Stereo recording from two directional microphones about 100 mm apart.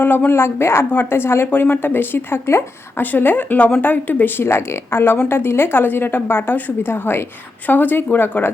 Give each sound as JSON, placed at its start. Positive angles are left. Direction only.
{"t": 0.0, "sound": "speech", "side_deg": 20}